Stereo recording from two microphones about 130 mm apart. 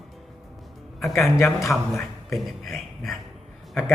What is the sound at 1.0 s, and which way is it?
A man's voice, centre (ahead or behind).